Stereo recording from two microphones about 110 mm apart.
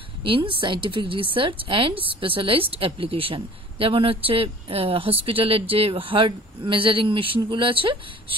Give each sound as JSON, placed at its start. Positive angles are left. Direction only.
{"t": 0.2, "sound": "speech", "side_deg": -50}